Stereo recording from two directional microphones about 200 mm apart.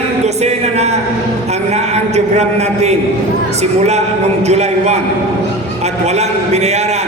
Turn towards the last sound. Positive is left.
turn(degrees=-35)  # may be behind; listen again after turning